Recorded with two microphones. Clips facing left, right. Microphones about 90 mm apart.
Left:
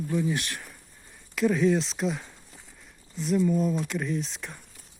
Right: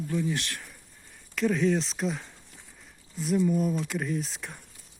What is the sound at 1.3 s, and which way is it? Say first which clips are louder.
Speech: left 2 dB; 5° left (ahead or behind).